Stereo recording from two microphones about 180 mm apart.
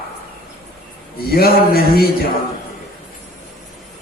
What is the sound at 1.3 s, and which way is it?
Mantra, 55° left (ahead or behind).